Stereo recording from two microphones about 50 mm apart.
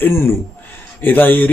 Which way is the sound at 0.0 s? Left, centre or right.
Left.